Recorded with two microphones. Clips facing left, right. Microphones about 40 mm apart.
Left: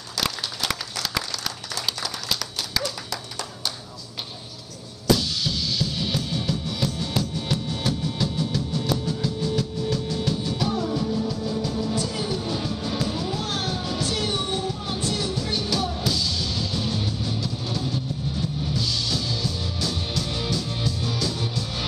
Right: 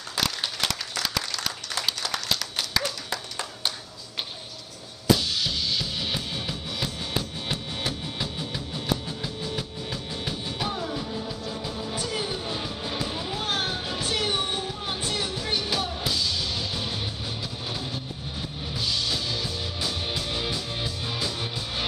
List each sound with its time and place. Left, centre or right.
2.8 s clapping: right
5.0 s music: right
10.9 s music: centre
11.8 s music: right
15.9 s music: centre